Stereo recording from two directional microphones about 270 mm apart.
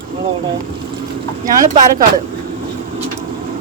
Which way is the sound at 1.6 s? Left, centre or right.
Right.